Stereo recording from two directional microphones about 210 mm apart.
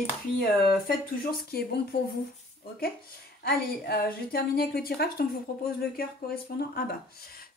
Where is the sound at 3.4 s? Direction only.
45° left (ahead or behind).